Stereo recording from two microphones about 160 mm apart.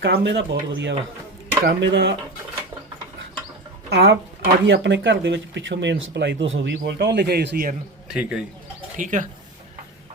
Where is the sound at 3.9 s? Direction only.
90° right.